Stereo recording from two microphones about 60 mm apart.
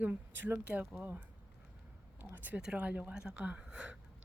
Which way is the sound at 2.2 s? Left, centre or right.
Right.